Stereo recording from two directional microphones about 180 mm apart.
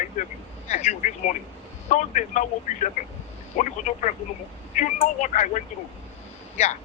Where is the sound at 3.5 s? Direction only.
45° left (ahead or behind).